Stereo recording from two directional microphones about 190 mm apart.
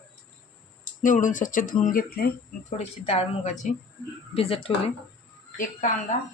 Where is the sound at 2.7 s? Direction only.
30° left (ahead or behind).